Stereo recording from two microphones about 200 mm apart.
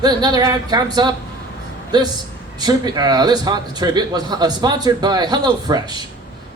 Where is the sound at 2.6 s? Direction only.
20° right (ahead or behind).